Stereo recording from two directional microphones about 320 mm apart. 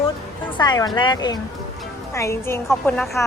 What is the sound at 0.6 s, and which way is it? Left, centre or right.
A woman's voice, centre.